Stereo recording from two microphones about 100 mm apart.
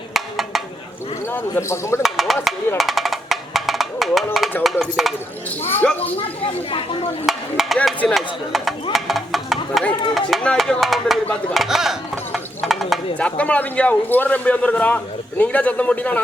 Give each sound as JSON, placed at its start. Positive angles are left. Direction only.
{"t": 0.1, "sound": "a sound", "side_deg": 0}
{"t": 1.3, "sound": "a man's voice", "side_deg": 20}
{"t": 2.0, "sound": "speech", "side_deg": 0}
{"t": 2.7, "sound": "music", "side_deg": 0}
{"t": 4.6, "sound": "speech", "side_deg": 0}
{"t": 5.5, "sound": "a man's voice", "side_deg": 20}
{"t": 6.1, "sound": "speech", "side_deg": 70}
{"t": 7.3, "sound": "speech", "side_deg": 0}
{"t": 12.3, "sound": "a sound", "side_deg": 0}
{"t": 13.1, "sound": "a man's voice", "side_deg": 15}